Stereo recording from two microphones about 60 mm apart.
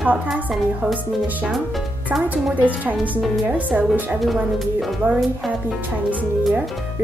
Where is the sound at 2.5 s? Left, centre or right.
Right.